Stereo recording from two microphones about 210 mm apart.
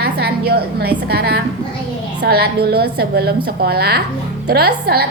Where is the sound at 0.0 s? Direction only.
50° right (ahead or behind).